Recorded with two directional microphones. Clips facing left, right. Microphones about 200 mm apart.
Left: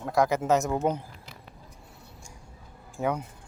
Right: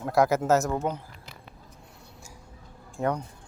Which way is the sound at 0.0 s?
5° right (ahead or behind).